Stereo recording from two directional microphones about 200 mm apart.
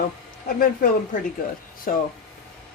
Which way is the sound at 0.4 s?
45° left (ahead or behind).